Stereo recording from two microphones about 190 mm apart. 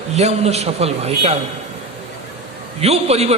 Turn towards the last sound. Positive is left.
turn(degrees=-35)  # may be behind; listen again after turning